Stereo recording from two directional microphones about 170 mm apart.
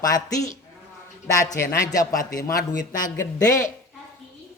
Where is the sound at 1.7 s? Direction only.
20° left (ahead or behind).